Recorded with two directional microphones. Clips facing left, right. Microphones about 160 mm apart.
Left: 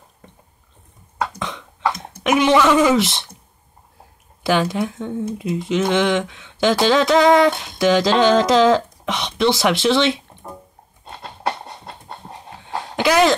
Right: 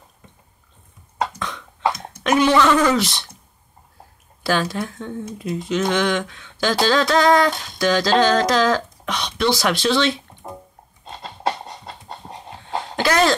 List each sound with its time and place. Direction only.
2.2 s speech: 20° left (ahead or behind)
3.0 s speech: 25° left (ahead or behind)
4.4 s speech: 20° left (ahead or behind)
11.1 s a sound: 55° left (ahead or behind)
12.9 s cough: 15° left (ahead or behind)